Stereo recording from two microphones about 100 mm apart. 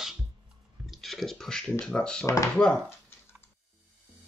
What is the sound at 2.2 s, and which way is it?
Speech, 30° left (ahead or behind).